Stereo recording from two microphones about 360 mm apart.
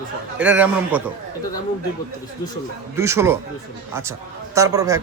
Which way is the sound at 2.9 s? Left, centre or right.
Centre.